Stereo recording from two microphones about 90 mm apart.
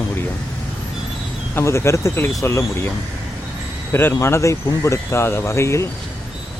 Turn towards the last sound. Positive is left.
turn(degrees=30)  # may be behind; listen again after turning